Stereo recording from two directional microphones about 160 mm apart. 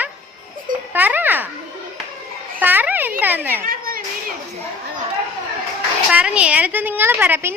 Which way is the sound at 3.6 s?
65° right (ahead or behind).